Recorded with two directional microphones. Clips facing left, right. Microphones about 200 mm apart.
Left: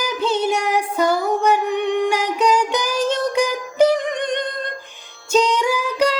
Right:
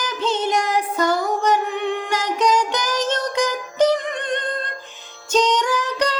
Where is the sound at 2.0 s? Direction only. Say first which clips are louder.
Left 2 dB; 10° left (ahead or behind).